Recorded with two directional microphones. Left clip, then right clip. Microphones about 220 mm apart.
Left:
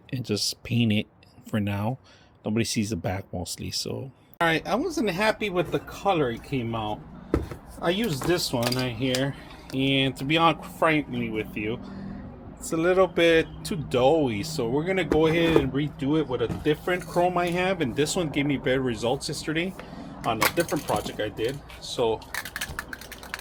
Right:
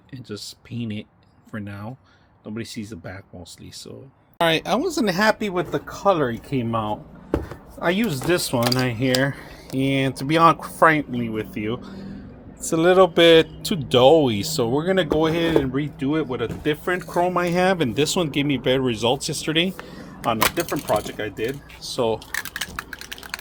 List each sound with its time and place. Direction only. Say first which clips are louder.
0.1 s speech: left 7 dB; 25° left (ahead or behind)
4.4 s speech: right 4 dB; 25° right (ahead or behind)
21.9 s typing: right 3 dB; 35° right (ahead or behind)